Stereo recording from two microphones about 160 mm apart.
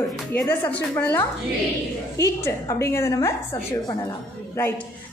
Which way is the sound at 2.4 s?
15° left (ahead or behind).